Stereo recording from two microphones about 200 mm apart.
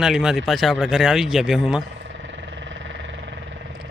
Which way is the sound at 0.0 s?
5° right (ahead or behind).